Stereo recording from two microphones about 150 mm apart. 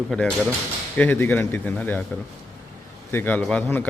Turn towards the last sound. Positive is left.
turn(degrees=10)  # may be behind; listen again after turning